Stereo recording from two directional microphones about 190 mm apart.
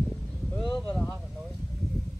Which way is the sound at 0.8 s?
5° left (ahead or behind).